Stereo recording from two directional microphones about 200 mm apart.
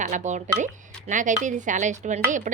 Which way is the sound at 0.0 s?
40° right (ahead or behind).